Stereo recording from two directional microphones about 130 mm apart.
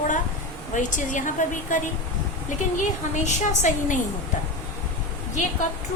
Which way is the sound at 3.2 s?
70° left (ahead or behind).